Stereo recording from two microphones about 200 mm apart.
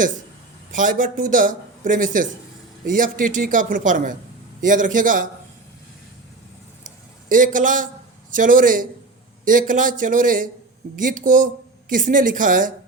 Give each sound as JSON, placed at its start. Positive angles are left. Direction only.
{"t": 0.7, "sound": "a man's voice", "side_deg": -40}
{"t": 6.8, "sound": "a sound", "side_deg": -40}
{"t": 8.4, "sound": "a man's voice", "side_deg": -45}